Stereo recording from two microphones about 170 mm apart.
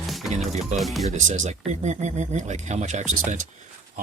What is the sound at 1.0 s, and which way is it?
Speech, 45° right (ahead or behind).